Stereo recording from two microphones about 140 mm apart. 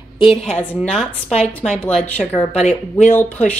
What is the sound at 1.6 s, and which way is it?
Speech, 5° left (ahead or behind).